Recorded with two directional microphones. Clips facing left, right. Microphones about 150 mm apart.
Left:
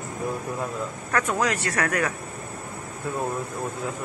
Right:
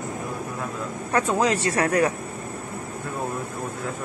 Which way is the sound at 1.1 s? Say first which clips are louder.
Right 3 dB; 25° right (ahead or behind).